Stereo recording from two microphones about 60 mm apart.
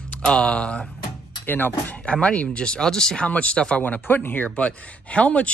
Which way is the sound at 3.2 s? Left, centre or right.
Left.